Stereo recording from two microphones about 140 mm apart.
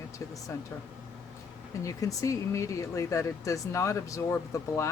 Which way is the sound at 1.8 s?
25° left (ahead or behind).